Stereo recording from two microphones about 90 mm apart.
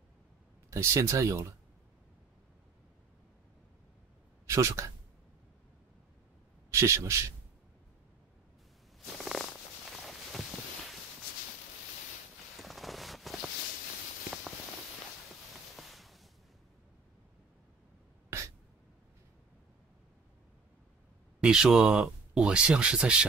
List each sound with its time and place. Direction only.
0.7 s speech: 30° right (ahead or behind)
4.5 s speech: 30° right (ahead or behind)
6.7 s a man's voice: 30° right (ahead or behind)
9.2 s purr: centre (ahead or behind)
12.5 s a sound: centre (ahead or behind)
15.7 s a sound: centre (ahead or behind)
21.4 s speech: 10° right (ahead or behind)